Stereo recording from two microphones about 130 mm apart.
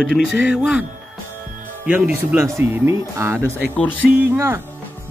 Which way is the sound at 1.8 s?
15° right (ahead or behind).